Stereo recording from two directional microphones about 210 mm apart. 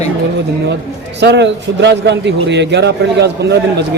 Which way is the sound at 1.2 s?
55° right (ahead or behind).